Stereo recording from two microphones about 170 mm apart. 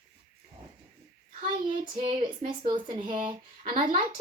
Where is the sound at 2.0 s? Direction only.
30° right (ahead or behind).